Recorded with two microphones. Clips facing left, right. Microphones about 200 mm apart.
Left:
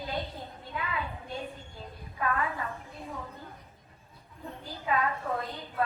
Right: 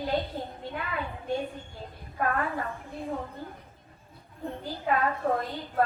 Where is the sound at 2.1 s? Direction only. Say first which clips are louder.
Right 3 dB; 50° right (ahead or behind).